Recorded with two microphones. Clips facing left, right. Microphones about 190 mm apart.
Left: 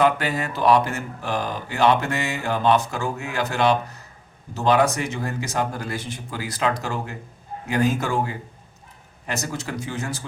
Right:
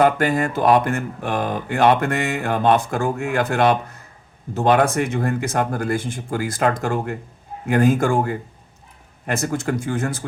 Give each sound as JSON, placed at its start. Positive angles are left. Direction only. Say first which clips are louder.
{"t": 0.0, "sound": "speech", "louder": "right 4 dB", "side_deg": -50}